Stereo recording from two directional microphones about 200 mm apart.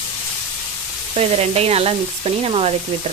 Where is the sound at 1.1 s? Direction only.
30° right (ahead or behind).